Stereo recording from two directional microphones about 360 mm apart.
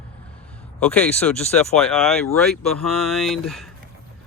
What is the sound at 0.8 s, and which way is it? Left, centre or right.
Speech, centre.